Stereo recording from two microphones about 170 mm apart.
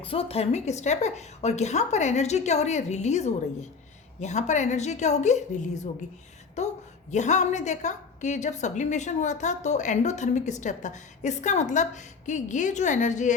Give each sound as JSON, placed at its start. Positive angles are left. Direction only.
{"t": 0.0, "sound": "a woman's voice", "side_deg": 35}